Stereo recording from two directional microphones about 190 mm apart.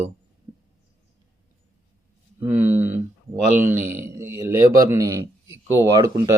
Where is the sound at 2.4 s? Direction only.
10° right (ahead or behind).